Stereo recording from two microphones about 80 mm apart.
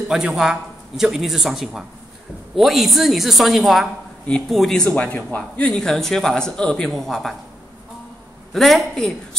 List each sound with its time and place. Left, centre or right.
0.1 s a man's voice: centre
4.8 s speech: centre
5.7 s a man's voice: centre
8.5 s a man's voice: centre